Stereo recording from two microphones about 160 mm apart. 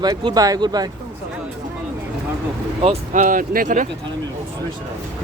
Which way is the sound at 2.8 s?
45° right (ahead or behind).